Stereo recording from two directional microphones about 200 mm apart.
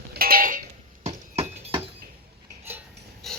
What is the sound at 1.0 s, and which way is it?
Clip-clop, 30° right (ahead or behind).